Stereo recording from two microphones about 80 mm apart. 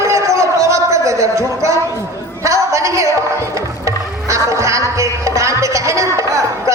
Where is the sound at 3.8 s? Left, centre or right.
Right.